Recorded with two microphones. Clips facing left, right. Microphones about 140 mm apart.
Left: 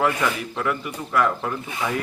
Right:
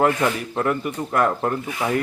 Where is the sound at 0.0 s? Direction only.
40° right (ahead or behind).